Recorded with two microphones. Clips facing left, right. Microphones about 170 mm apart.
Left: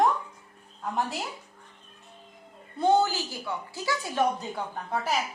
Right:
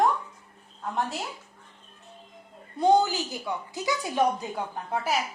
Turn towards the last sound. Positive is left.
turn(degrees=-10)  # may be behind; listen again after turning